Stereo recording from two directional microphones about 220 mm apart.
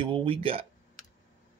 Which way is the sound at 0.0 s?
25° right (ahead or behind).